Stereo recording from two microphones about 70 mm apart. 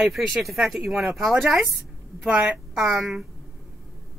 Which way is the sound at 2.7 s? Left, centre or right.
Centre.